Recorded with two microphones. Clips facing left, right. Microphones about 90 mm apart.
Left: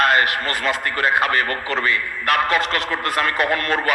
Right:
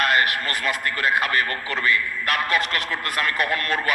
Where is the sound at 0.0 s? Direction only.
30° left (ahead or behind).